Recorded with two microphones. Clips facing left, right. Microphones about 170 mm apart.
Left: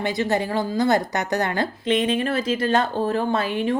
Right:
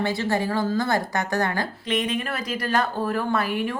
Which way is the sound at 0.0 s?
20° left (ahead or behind).